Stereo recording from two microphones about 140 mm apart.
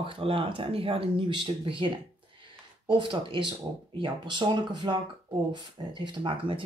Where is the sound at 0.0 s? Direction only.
40° right (ahead or behind).